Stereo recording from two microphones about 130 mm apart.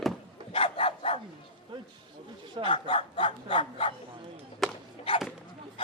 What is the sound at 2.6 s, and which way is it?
Speech, 40° left (ahead or behind).